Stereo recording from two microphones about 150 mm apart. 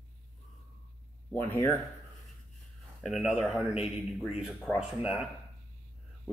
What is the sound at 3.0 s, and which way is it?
Speech, centre (ahead or behind).